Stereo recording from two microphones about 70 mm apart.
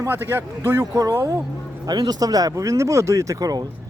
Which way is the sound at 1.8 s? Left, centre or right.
Right.